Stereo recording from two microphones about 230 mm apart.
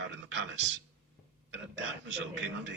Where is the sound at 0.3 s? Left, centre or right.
Right.